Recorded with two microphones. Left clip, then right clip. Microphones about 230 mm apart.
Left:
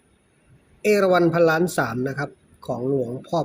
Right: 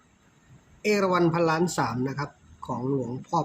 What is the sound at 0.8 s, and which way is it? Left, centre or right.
Speech, centre.